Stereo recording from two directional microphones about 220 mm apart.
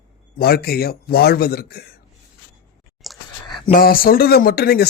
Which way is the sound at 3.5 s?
20° left (ahead or behind).